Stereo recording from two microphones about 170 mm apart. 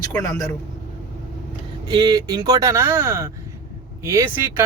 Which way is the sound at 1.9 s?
25° right (ahead or behind).